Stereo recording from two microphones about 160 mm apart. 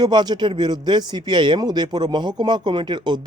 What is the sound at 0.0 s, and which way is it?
Speech, 25° right (ahead or behind).